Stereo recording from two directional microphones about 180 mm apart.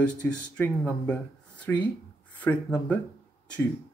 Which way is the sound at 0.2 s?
5° left (ahead or behind).